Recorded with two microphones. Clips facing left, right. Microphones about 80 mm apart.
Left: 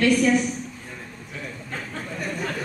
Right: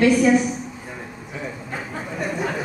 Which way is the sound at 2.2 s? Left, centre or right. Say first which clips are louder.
Right 5 dB; centre.